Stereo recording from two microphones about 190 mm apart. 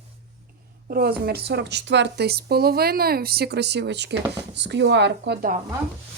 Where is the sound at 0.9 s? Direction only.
55° right (ahead or behind).